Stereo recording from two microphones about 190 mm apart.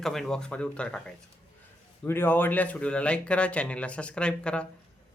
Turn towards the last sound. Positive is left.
turn(degrees=5)  # may be behind; listen again after turning